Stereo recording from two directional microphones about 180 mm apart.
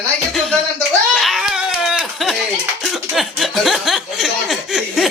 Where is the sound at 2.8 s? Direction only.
Centre (ahead or behind).